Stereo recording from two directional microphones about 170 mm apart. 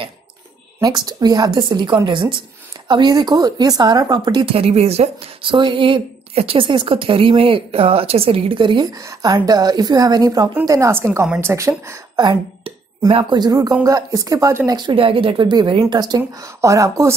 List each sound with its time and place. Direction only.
0.7 s speech: 25° right (ahead or behind)
11.2 s a woman's voice: 5° right (ahead or behind)
11.5 s speech: 15° right (ahead or behind)